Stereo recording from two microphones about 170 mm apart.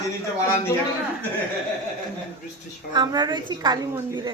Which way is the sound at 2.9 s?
25° right (ahead or behind).